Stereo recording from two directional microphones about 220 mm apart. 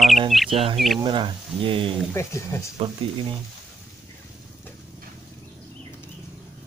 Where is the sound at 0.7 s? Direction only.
Centre (ahead or behind).